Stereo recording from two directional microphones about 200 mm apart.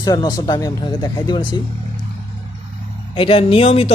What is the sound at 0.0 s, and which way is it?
Speech, 20° left (ahead or behind).